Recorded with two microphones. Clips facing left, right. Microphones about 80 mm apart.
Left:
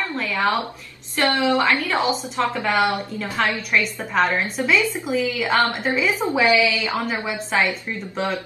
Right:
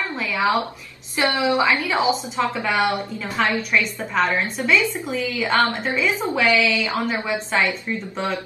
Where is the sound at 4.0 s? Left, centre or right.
Centre.